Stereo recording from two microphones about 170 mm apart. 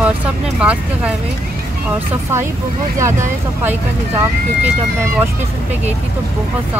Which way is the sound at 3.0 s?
15° right (ahead or behind).